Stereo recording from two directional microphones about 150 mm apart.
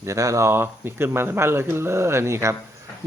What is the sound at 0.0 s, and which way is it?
Speech, 20° right (ahead or behind).